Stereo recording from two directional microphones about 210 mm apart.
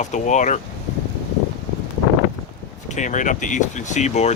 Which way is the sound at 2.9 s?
35° left (ahead or behind).